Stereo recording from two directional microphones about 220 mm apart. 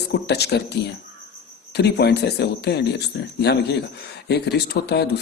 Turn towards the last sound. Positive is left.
turn(degrees=50)  # may be behind; listen again after turning